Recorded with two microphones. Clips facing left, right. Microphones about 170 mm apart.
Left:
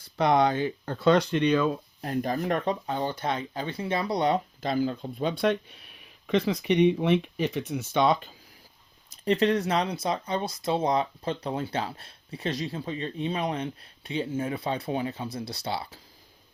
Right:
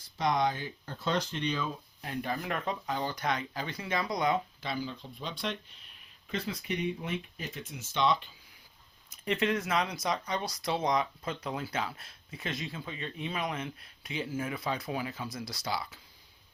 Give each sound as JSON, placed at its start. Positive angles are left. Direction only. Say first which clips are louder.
{"t": 0.2, "sound": "speech", "louder": "left 7 dB", "side_deg": 65}
{"t": 2.0, "sound": "speech", "louder": "left 7 dB", "side_deg": 40}
{"t": 6.2, "sound": "speech", "louder": "left 11 dB", "side_deg": 80}
{"t": 9.0, "sound": "speech", "louder": "left 7 dB", "side_deg": 35}